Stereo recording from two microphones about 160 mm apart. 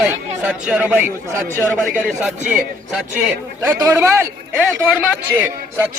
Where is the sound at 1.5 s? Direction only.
10° left (ahead or behind).